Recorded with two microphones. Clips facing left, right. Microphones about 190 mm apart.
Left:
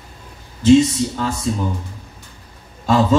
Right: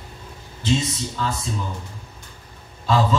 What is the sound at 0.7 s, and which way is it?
Speech, 45° left (ahead or behind).